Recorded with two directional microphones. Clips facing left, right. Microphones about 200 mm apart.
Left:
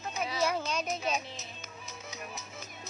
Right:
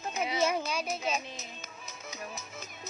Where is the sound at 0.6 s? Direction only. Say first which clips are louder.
Even; 10° right (ahead or behind).